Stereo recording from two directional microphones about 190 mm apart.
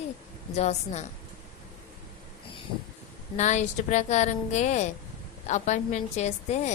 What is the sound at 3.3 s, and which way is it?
A woman's voice, 40° left (ahead or behind).